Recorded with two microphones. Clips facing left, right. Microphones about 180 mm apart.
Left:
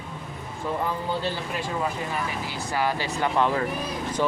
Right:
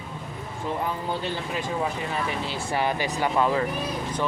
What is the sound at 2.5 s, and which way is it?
Speech, 25° right (ahead or behind).